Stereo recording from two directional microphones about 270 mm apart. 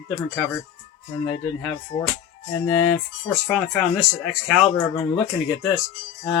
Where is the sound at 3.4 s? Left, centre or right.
Centre.